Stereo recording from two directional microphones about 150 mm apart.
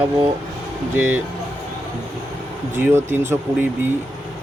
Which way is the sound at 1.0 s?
10° right (ahead or behind).